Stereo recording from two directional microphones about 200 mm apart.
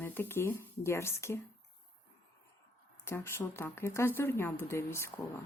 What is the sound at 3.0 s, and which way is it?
Speech, 10° left (ahead or behind).